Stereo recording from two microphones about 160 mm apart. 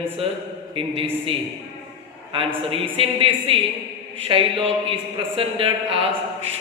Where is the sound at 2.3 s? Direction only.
35° right (ahead or behind).